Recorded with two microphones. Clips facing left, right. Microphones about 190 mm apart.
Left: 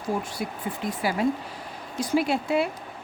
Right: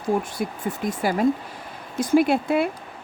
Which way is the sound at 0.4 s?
50° right (ahead or behind).